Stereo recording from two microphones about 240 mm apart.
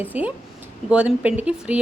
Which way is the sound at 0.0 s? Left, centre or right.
Centre.